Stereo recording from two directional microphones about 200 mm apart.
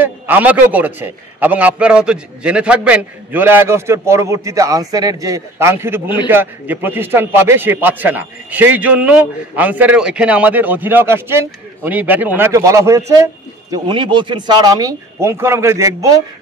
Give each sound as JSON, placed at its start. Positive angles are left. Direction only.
{"t": 0.0, "sound": "a man's voice", "side_deg": -10}